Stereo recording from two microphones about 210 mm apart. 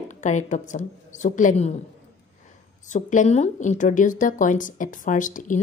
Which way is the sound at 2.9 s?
35° left (ahead or behind).